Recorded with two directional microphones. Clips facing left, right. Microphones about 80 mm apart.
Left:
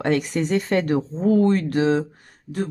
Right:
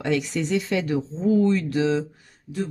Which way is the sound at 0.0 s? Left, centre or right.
Left.